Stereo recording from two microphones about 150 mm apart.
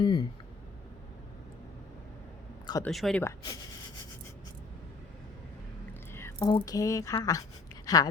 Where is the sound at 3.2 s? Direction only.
25° left (ahead or behind).